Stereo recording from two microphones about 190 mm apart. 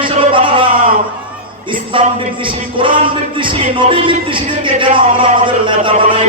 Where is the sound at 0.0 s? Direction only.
25° right (ahead or behind).